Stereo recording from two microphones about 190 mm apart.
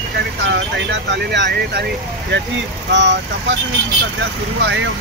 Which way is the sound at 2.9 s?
70° right (ahead or behind).